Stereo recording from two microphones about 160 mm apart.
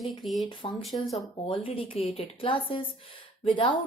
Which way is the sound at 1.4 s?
35° left (ahead or behind).